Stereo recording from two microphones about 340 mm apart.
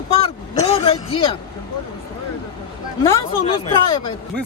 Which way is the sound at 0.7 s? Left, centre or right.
Centre.